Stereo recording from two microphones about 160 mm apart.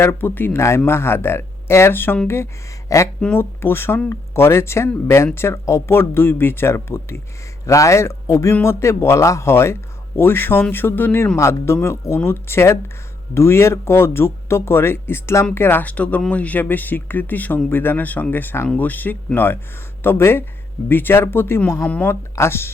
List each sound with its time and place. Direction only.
0.0 s speech: 15° left (ahead or behind)